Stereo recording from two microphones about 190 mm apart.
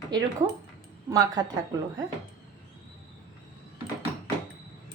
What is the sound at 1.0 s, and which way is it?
Speech, 20° right (ahead or behind).